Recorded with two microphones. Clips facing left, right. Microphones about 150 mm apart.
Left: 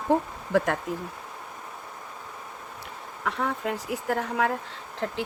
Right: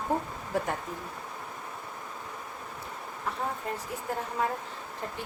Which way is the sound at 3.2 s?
80° left.